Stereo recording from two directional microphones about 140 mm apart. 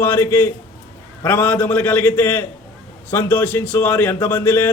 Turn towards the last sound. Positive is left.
turn(degrees=15)  # may be behind; listen again after turning